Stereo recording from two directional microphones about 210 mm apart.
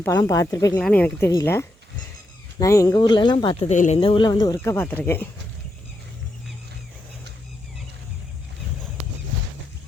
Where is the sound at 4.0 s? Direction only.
25° left (ahead or behind).